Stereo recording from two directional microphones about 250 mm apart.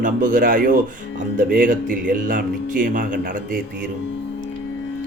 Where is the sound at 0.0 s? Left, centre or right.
Right.